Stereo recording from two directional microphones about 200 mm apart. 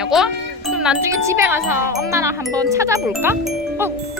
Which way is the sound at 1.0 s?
15° right (ahead or behind).